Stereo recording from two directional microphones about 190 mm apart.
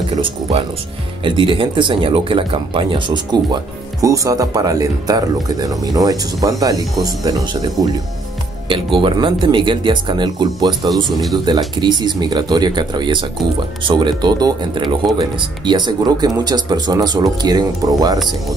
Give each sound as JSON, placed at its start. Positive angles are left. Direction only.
{"t": 0.2, "sound": "speech", "side_deg": -30}